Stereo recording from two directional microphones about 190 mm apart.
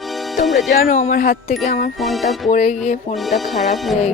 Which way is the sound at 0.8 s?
40° left (ahead or behind).